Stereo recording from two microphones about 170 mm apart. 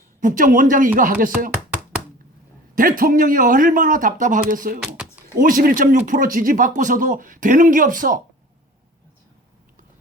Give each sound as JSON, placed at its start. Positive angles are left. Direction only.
{"t": 0.2, "sound": "speech", "side_deg": -50}
{"t": 2.7, "sound": "speech", "side_deg": -55}
{"t": 4.8, "sound": "a sound", "side_deg": -5}
{"t": 5.3, "sound": "speech", "side_deg": -55}